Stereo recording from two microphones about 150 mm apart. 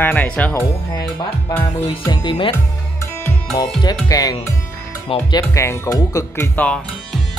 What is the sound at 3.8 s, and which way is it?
Speech, 25° left (ahead or behind).